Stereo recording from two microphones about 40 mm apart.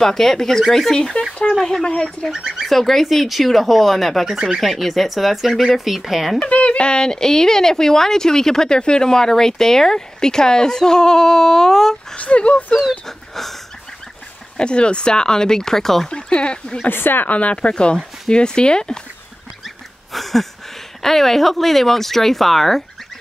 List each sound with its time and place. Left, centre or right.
0.0 s speech: centre
1.1 s speech: left
1.6 s speech: centre
2.3 s speech: centre
2.7 s speech: centre
6.4 s speech: left; by 12.0 s centre
12.2 s speech: left
13.3 s dog: centre
14.6 s speech: left; by 16.1 s centre
16.1 s speech: left
16.9 s speech: left
17.3 s speech: left
20.1 s a sound: centre
21.0 s speech: centre